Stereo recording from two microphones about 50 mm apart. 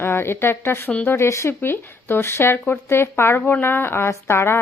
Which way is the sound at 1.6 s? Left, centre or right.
Left.